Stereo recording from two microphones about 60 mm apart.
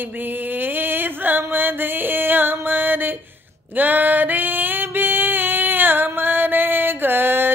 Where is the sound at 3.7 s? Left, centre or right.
Right.